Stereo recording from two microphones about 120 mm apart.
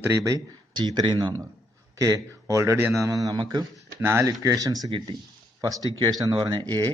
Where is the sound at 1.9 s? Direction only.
30° right (ahead or behind).